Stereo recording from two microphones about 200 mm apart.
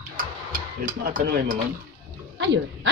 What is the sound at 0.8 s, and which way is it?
Speech, 45° right (ahead or behind).